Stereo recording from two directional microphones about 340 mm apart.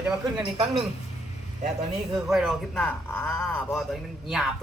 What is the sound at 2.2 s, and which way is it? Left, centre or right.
Speech, centre.